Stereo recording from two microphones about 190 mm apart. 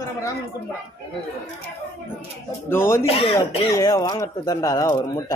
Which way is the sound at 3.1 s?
30° left (ahead or behind).